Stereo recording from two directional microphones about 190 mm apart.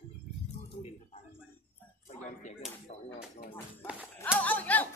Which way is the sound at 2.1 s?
40° left (ahead or behind).